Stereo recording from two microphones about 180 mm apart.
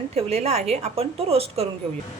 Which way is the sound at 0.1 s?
35° right (ahead or behind).